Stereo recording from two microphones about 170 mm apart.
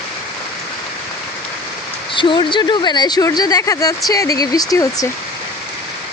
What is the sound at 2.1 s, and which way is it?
Speech, 30° left (ahead or behind).